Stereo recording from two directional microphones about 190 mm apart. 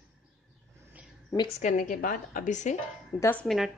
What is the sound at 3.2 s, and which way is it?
Speech, 10° left (ahead or behind).